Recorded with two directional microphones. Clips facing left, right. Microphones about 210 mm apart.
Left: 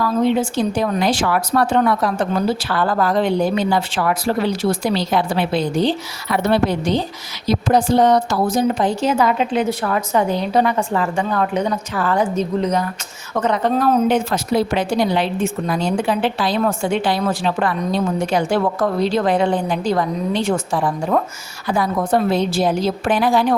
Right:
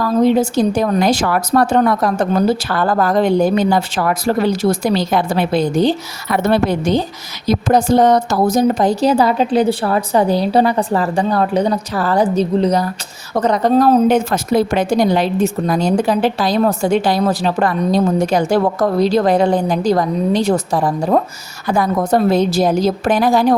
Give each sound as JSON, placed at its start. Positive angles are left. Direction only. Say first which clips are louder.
{"t": 0.0, "sound": "a woman's voice", "louder": "right 4 dB", "side_deg": -40}